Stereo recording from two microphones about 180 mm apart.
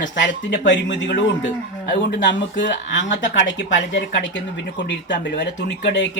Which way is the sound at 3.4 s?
80° left.